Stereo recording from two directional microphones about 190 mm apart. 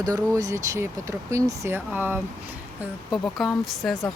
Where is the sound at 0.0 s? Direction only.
20° right (ahead or behind).